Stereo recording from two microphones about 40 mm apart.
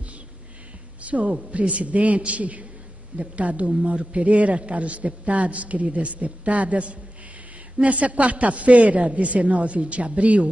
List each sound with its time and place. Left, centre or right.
1.0 s a man's voice: right